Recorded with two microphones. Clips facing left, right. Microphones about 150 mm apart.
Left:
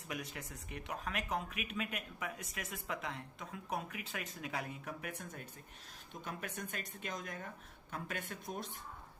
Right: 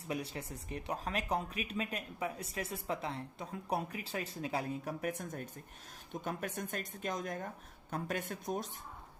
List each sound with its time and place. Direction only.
0.1 s speech: 30° right (ahead or behind)
6.6 s speech: 45° right (ahead or behind)